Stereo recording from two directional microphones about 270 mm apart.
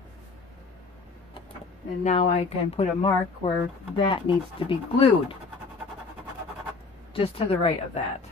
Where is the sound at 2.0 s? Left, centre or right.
Left.